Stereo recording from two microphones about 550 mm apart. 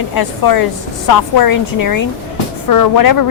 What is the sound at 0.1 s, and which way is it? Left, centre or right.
A woman's voice, left.